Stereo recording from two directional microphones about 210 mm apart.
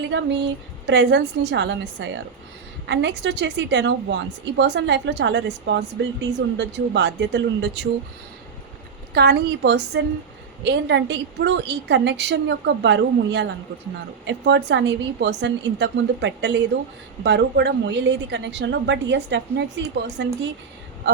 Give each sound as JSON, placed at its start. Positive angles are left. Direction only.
{"t": 0.1, "sound": "a woman's voice", "side_deg": -60}
{"t": 9.1, "sound": "a woman's voice", "side_deg": -50}